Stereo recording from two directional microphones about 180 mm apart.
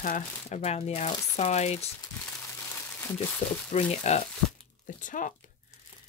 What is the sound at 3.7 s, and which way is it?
Speech, 35° left (ahead or behind).